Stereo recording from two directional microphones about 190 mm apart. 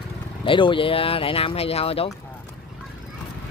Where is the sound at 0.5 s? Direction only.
25° left (ahead or behind).